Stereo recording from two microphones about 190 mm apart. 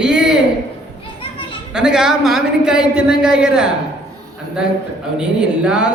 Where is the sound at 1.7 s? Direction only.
5° right (ahead or behind).